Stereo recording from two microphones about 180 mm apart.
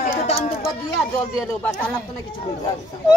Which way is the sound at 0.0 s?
40° left (ahead or behind).